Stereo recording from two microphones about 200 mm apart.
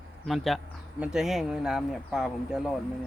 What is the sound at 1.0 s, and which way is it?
Speech, 5° right (ahead or behind).